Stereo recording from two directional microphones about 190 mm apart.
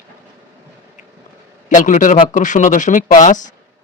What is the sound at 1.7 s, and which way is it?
Speech, 40° left (ahead or behind).